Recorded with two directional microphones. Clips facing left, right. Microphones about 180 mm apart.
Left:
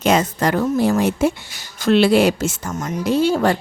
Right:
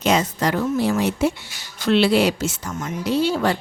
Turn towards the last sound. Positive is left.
turn(degrees=45)  # may be behind; listen again after turning